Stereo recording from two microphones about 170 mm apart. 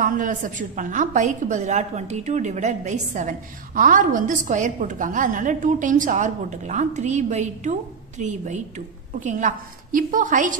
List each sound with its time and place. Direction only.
0.0 s a woman's voice: 50° right (ahead or behind)